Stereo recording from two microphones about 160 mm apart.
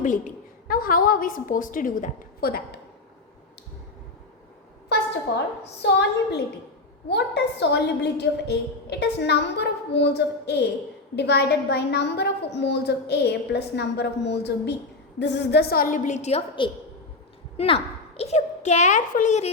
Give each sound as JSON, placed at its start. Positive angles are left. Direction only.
{"t": 0.0, "sound": "a woman's voice", "side_deg": 55}
{"t": 5.8, "sound": "a woman's voice", "side_deg": 90}
{"t": 16.6, "sound": "a woman's voice", "side_deg": 30}